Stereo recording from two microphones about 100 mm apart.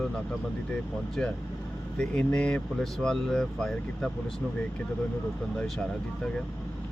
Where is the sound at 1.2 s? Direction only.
10° left (ahead or behind).